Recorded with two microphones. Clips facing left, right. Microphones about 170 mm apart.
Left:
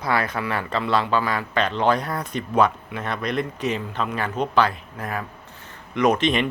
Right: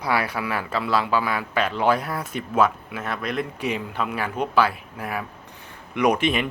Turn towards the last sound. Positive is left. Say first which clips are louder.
# left 1 dB
turn(degrees=-10)  # may be behind; listen again after turning